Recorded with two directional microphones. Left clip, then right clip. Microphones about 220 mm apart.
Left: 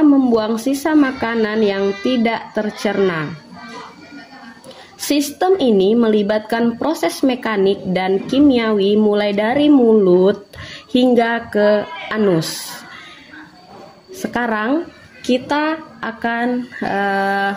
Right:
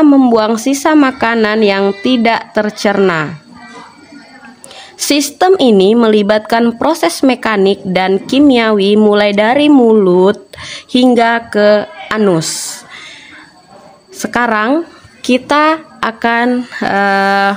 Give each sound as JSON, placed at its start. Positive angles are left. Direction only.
{"t": 0.0, "sound": "speech", "side_deg": -35}
{"t": 4.9, "sound": "a woman's voice", "side_deg": -30}
{"t": 14.1, "sound": "a woman's voice", "side_deg": -25}